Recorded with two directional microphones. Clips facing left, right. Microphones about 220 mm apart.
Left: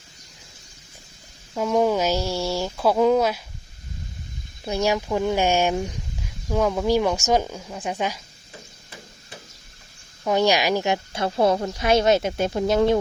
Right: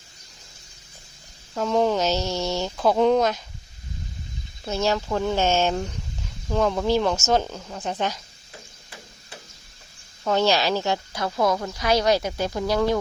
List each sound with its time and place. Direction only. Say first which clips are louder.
1.5 s speech: left 1 dB; 10° left (ahead or behind)
4.6 s speech: left 1 dB; 15° left (ahead or behind)
10.2 s speech: left 1 dB; 15° left (ahead or behind)